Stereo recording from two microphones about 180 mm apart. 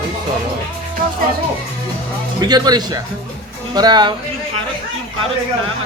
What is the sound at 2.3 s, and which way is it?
Speech, 20° right (ahead or behind).